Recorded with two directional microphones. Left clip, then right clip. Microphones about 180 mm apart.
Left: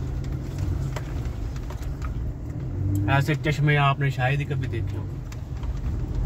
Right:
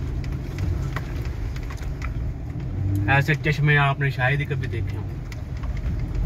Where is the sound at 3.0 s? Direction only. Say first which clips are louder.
Right 4 dB; 60° left (ahead or behind).